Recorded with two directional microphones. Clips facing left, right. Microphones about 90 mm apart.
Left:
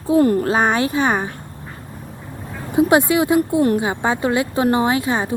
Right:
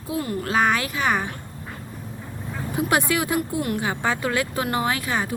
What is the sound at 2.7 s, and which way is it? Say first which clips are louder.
Speech: left 8 dB; 20° left (ahead or behind).